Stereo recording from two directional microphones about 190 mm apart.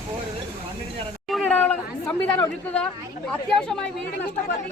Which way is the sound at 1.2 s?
5° left (ahead or behind).